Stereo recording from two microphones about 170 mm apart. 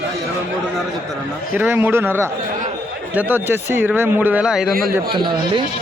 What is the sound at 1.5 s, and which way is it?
A man's voice, 10° right (ahead or behind).